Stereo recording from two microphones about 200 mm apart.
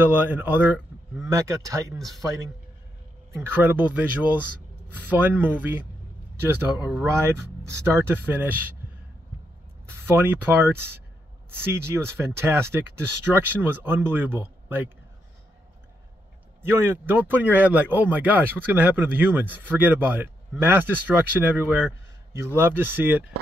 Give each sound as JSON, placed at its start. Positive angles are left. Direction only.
{"t": 0.0, "sound": "speech", "side_deg": -10}
{"t": 1.3, "sound": "speech", "side_deg": -15}
{"t": 3.3, "sound": "speech", "side_deg": -10}
{"t": 9.8, "sound": "speech", "side_deg": -10}
{"t": 16.6, "sound": "speech", "side_deg": -10}